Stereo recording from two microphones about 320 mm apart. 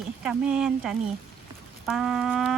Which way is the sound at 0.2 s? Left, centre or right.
Centre.